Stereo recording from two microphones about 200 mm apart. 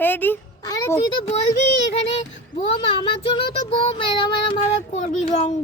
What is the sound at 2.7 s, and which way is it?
Child singing, 25° left (ahead or behind).